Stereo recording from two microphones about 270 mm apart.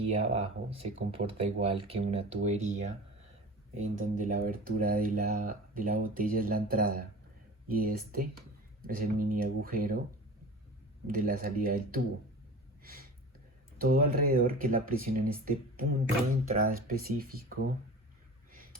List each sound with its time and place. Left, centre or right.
0.1 s speech: right
11.0 s speech: right
12.8 s a sound: right
13.7 s speech: right